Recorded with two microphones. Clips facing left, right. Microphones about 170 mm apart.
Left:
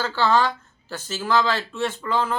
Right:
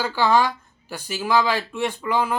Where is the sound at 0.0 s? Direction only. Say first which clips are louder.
Right 1 dB; 15° right (ahead or behind).